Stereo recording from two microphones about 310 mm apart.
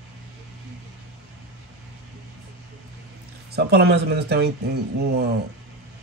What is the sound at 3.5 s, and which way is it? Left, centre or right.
Speech, right.